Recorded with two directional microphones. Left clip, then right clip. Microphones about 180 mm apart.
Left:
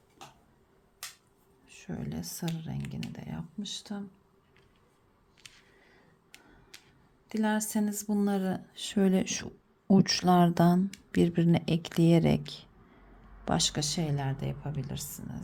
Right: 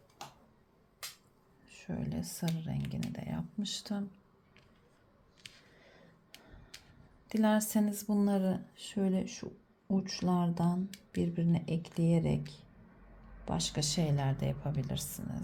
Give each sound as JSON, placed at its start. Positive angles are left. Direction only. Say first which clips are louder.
{"t": 1.6, "sound": "speech", "louder": "left 1 dB", "side_deg": 15}
{"t": 7.3, "sound": "speech", "louder": "even", "side_deg": 0}
{"t": 8.8, "sound": "speech", "louder": "left 8 dB", "side_deg": 35}
{"t": 13.4, "sound": "speech", "louder": "left 7 dB", "side_deg": 25}
{"t": 13.8, "sound": "speech", "louder": "left 1 dB", "side_deg": 10}